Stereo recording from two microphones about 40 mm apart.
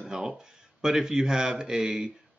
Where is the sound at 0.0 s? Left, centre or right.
Centre.